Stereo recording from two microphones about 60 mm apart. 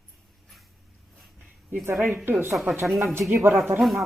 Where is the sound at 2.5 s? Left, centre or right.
Centre.